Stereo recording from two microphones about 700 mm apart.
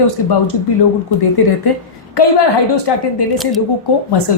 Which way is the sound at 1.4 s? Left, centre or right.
Left.